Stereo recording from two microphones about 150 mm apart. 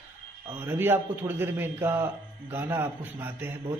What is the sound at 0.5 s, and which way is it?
A man's voice, 15° right (ahead or behind).